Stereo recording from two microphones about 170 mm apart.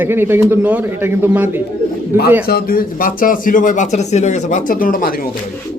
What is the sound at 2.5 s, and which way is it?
Speech, 60° left (ahead or behind).